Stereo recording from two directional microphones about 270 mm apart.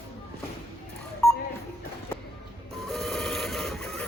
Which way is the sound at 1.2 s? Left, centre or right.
Centre.